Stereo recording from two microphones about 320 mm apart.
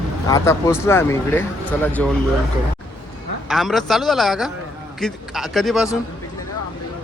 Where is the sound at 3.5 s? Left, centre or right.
Centre.